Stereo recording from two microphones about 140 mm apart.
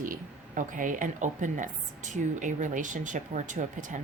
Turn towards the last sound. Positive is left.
turn(degrees=-65)  # may be behind; listen again after turning